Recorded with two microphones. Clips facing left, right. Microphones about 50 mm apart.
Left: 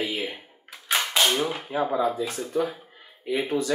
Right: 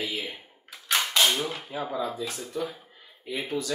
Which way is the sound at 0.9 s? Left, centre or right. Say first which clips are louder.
Left 1 dB; centre.